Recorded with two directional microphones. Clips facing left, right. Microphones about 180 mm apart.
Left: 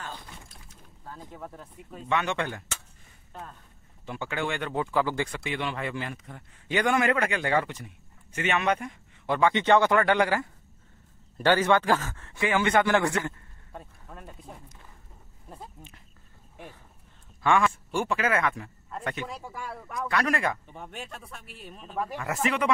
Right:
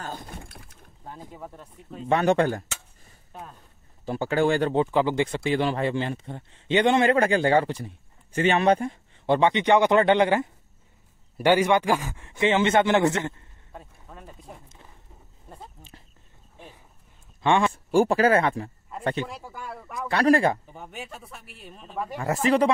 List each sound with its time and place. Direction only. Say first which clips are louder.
0.0 s a sound: right 5 dB; 45° right (ahead or behind)
1.2 s speech: left 1 dB; 5° right (ahead or behind)
2.0 s speech: right 8 dB; 40° right (ahead or behind)
4.0 s speech: right 9 dB; 35° right (ahead or behind)
4.9 s a man's voice: right 4 dB; 20° right (ahead or behind)
13.7 s speech: even; centre (ahead or behind)
17.4 s speech: right 2 dB; 25° right (ahead or behind)
19.2 s speech: even; centre (ahead or behind)
20.1 s speech: right 8 dB; 30° right (ahead or behind)
20.6 s speech: right 1 dB; centre (ahead or behind)
22.1 s speech: right 8 dB; 30° right (ahead or behind)